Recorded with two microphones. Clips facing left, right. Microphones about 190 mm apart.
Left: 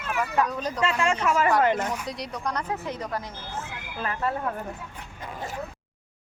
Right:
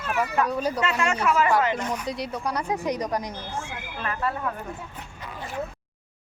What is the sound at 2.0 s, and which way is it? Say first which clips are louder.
Speech: right 3 dB; centre (ahead or behind).